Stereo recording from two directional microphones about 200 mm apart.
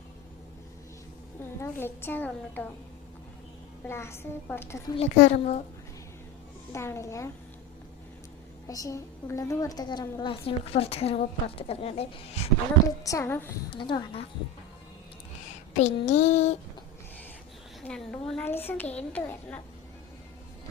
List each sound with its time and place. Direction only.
1.4 s a child's voice: 10° left (ahead or behind)
3.8 s a child's voice: 15° left (ahead or behind)
4.9 s a sound: 35° left (ahead or behind)
6.7 s a child's voice: 15° left (ahead or behind)
8.6 s a woman's voice: 15° left (ahead or behind)
12.8 s a child's voice: 15° left (ahead or behind)
13.7 s a woman's voice: 25° left (ahead or behind)
15.8 s a sound: 35° left (ahead or behind)
17.8 s a child's voice: 5° left (ahead or behind)